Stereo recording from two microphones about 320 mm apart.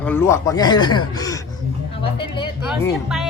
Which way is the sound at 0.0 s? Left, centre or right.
Centre.